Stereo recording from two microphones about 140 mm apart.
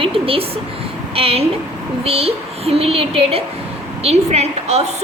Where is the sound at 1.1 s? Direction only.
45° right (ahead or behind).